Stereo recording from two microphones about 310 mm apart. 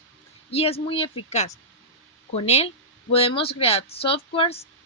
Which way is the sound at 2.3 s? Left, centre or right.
Centre.